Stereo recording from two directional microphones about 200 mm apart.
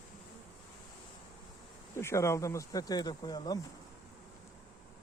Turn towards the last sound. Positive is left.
turn(degrees=20)  # may be behind; listen again after turning